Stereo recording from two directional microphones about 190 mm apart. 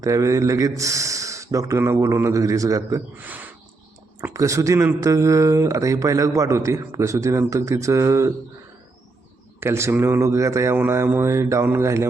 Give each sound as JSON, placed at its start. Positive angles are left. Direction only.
{"t": 0.0, "sound": "speech", "side_deg": -15}
{"t": 9.6, "sound": "speech", "side_deg": -15}